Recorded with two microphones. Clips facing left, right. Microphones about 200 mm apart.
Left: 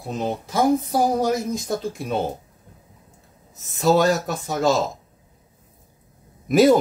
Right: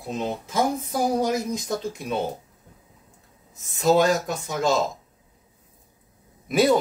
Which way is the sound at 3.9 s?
45° left (ahead or behind).